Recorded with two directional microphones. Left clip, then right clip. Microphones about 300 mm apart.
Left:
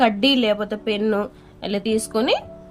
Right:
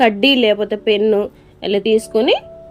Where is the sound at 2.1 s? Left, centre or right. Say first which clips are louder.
Right 6 dB; left.